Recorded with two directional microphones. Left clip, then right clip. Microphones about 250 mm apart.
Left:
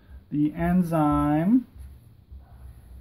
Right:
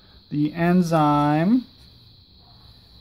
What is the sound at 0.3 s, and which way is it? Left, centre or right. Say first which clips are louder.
Speech: right 3 dB; right.